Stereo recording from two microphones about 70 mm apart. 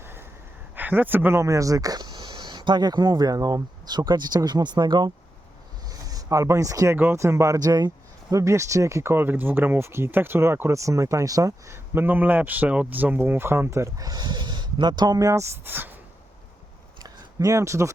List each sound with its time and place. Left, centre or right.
0.0 s a sound: right
0.8 s speech: right
5.9 s speech: right
6.9 s speech: right
7.2 s speech: right
7.6 s speech: right
9.1 s speech: right
11.9 s speech: right
14.0 s speech: right
15.6 s speech: right
17.0 s a sound: right